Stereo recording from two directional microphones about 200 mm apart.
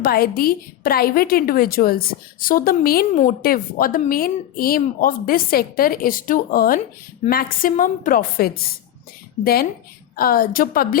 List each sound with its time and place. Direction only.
0.0 s a woman's voice: 50° left (ahead or behind)